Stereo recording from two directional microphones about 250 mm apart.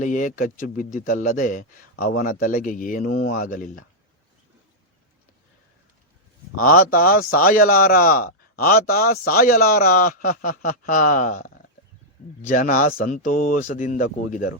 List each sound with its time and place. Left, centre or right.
0.0 s a man's voice: left
6.6 s a man's voice: left